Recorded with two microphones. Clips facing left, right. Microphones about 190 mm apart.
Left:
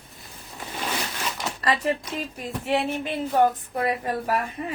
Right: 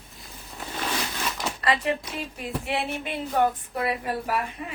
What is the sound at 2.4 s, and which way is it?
Speech, 40° left (ahead or behind).